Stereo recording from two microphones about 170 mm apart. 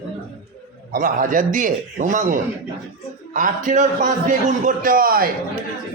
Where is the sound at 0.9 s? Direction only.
50° right (ahead or behind).